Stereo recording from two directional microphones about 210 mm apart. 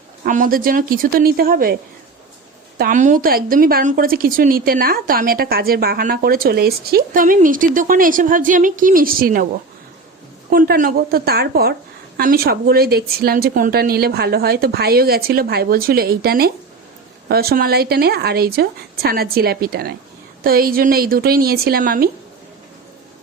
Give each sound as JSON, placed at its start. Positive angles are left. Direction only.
{"t": 0.3, "sound": "a woman's voice", "side_deg": -40}
{"t": 10.5, "sound": "a woman's voice", "side_deg": -45}